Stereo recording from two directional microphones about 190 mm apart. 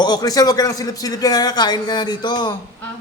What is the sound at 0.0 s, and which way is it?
A man's voice, 20° left (ahead or behind).